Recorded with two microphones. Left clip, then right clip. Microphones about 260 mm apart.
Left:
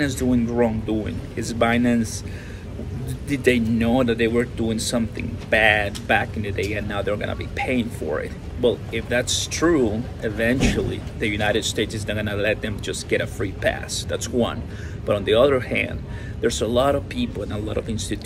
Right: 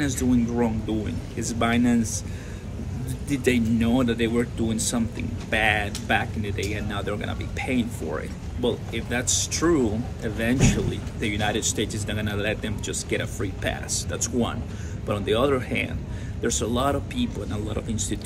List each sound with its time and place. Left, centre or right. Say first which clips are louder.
0.0 s speech: left 2 dB; centre
3.3 s speech: left 4 dB; centre